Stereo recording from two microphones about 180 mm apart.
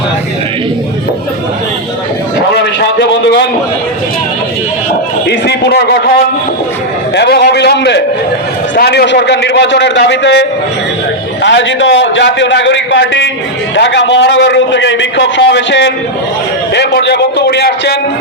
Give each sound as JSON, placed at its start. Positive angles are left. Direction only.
{"t": 2.8, "sound": "a sound", "side_deg": 70}
{"t": 5.3, "sound": "a man's voice", "side_deg": 65}
{"t": 7.2, "sound": "a man's voice", "side_deg": 65}
{"t": 11.4, "sound": "a man's voice", "side_deg": 80}